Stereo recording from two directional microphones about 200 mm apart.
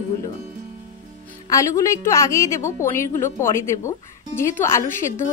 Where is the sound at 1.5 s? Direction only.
15° left (ahead or behind).